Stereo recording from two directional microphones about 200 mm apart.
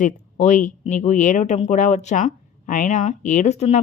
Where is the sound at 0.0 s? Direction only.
40° left (ahead or behind).